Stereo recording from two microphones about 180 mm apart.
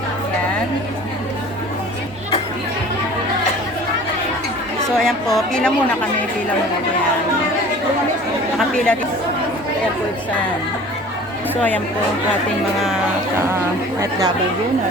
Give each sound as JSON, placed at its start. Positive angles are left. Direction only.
{"t": 4.9, "sound": "speech", "side_deg": 5}
{"t": 8.5, "sound": "speech", "side_deg": 5}
{"t": 14.0, "sound": "speech", "side_deg": -20}